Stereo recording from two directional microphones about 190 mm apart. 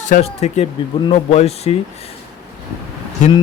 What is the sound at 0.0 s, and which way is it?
Speech, 35° left (ahead or behind).